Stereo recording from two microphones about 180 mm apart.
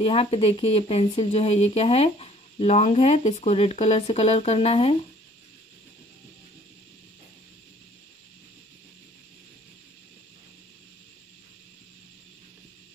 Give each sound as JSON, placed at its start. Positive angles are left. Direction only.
{"t": 0.0, "sound": "speech", "side_deg": 35}